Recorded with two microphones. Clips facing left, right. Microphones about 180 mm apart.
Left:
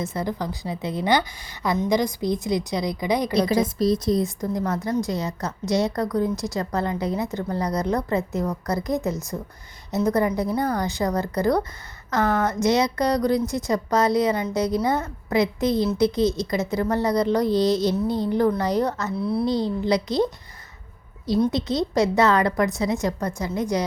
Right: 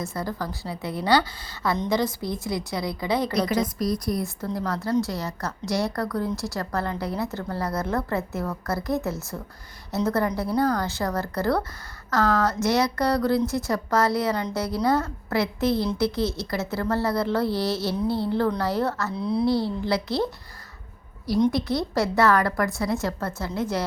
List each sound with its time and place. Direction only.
0.0 s a woman's voice: 20° left (ahead or behind)
3.6 s a woman's voice: 25° left (ahead or behind)
19.2 s a woman's voice: 5° left (ahead or behind)
19.5 s a woman's voice: 20° left (ahead or behind)
21.5 s a woman's voice: 20° left (ahead or behind)